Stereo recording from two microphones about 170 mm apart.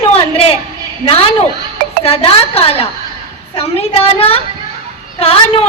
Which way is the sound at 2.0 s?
35° left (ahead or behind).